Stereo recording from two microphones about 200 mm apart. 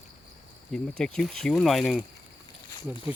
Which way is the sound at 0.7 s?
5° left (ahead or behind).